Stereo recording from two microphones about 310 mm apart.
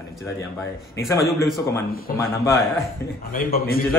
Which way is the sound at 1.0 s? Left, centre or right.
Centre.